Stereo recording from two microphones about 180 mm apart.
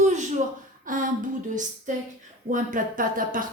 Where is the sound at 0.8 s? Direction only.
45° right (ahead or behind).